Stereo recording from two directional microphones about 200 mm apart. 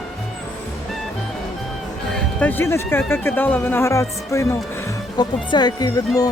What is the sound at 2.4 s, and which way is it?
Speech, 10° left (ahead or behind).